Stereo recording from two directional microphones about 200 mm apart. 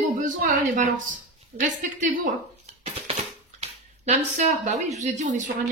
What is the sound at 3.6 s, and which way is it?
Speech, 35° right (ahead or behind).